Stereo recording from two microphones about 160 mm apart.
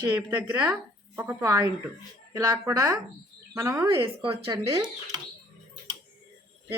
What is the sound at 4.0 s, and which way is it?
Speech, 35° right (ahead or behind).